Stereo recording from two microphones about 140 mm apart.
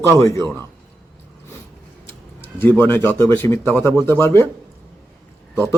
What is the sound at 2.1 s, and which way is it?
Speech, 15° left (ahead or behind).